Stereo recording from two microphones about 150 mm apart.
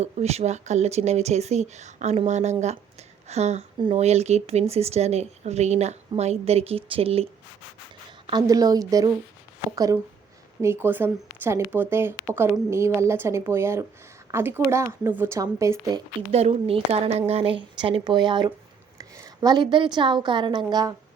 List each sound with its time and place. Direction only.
0.0 s speech: 45° right (ahead or behind)
8.3 s speech: 25° right (ahead or behind)
16.3 s a woman's voice: 40° right (ahead or behind)